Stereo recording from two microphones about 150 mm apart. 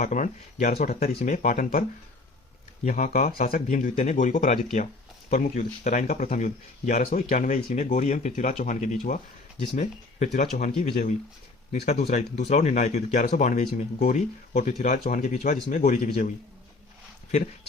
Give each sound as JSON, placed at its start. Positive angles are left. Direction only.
{"t": 0.0, "sound": "speech", "side_deg": 55}
{"t": 0.7, "sound": "speech", "side_deg": 75}
{"t": 2.8, "sound": "speech", "side_deg": 60}